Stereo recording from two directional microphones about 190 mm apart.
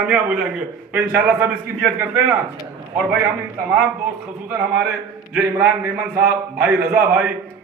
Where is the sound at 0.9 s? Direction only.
10° right (ahead or behind).